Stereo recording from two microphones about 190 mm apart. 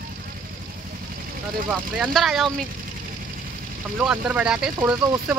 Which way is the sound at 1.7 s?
5° right (ahead or behind).